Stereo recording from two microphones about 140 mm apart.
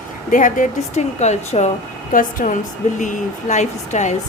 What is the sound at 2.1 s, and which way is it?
A woman's voice, 70° left (ahead or behind).